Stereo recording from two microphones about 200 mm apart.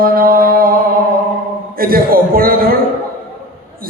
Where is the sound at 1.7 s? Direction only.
45° right (ahead or behind).